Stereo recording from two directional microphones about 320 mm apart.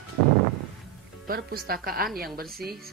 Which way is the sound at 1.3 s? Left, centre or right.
Right.